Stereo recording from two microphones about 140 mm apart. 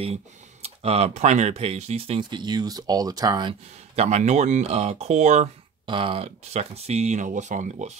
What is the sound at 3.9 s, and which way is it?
Speech, 50° right (ahead or behind).